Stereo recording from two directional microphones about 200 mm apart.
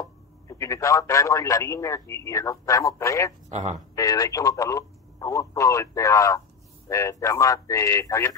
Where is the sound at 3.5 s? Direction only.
35° right (ahead or behind).